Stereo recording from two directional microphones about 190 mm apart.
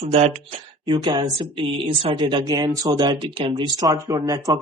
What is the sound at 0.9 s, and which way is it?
Speech, 20° right (ahead or behind).